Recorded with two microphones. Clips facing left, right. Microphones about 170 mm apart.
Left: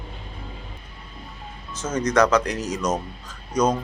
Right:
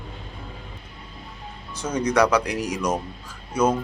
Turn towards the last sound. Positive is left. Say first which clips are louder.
# even
turn(degrees=-10)  # may be behind; listen again after turning